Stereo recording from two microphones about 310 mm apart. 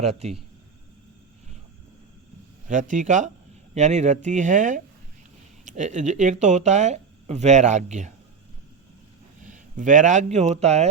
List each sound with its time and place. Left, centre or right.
0.0 s speech: right
2.6 s speech: right
9.5 s speech: right